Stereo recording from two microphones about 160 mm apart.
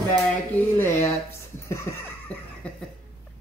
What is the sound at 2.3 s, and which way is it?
Cough, 10° left (ahead or behind).